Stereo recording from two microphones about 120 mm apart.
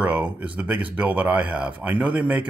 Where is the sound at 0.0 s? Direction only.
15° right (ahead or behind).